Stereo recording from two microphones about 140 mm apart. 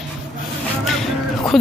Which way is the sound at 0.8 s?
Centre (ahead or behind).